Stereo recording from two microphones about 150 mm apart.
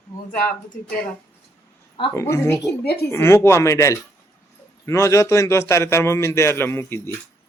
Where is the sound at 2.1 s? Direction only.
20° left (ahead or behind).